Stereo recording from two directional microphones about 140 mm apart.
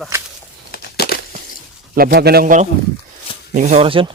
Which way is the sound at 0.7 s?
90° left.